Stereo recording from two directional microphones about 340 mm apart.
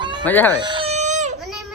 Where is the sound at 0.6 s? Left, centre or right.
Centre.